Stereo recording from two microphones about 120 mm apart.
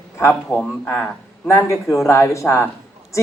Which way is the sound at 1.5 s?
25° left (ahead or behind).